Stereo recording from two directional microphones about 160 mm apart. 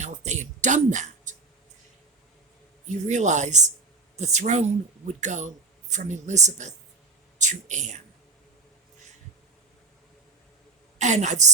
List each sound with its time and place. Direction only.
0.0 s a sound: 45° right (ahead or behind)
2.9 s speech: 50° right (ahead or behind)
10.9 s a woman's voice: 45° right (ahead or behind)